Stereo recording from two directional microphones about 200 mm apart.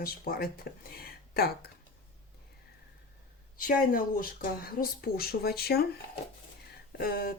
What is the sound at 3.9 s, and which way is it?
Speech, 45° left (ahead or behind).